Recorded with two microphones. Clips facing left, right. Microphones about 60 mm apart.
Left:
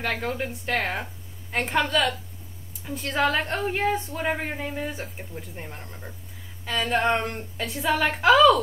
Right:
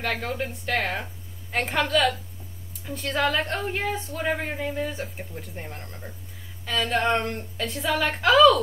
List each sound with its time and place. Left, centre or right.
0.0 s speech: centre
4.9 s speech: centre